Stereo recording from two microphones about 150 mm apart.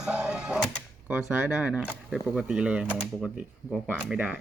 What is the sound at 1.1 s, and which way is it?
Speech, 5° right (ahead or behind).